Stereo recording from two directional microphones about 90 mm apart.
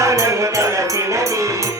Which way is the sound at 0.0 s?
35° right (ahead or behind).